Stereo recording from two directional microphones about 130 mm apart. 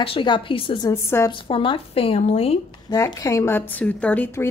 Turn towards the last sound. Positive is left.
turn(degrees=15)  # may be behind; listen again after turning